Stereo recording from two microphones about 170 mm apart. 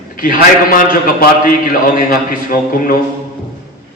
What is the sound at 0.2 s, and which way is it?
A man's voice, 55° left (ahead or behind).